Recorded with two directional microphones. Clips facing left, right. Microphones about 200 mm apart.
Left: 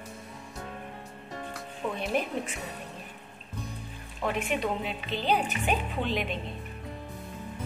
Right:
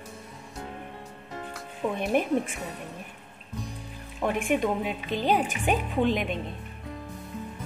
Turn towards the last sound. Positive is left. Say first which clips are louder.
# right 5 dB
turn(degrees=-50)  # may be behind; listen again after turning